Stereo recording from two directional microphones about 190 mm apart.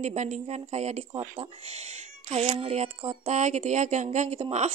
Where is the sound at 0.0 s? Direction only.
35° right (ahead or behind).